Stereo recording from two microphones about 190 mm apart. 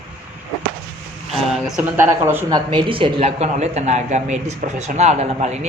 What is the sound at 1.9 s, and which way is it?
Speech, 10° right (ahead or behind).